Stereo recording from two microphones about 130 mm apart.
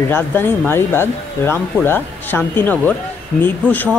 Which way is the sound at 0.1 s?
15° left (ahead or behind).